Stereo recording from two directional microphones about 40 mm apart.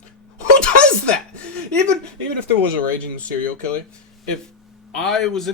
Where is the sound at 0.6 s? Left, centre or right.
Left.